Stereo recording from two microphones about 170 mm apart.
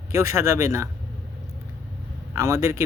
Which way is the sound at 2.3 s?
15° right (ahead or behind).